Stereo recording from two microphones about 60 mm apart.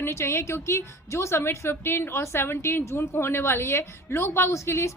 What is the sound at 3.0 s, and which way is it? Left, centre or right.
A woman's voice, left.